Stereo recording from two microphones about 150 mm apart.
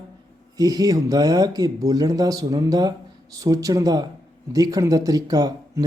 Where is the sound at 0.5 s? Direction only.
25° right (ahead or behind).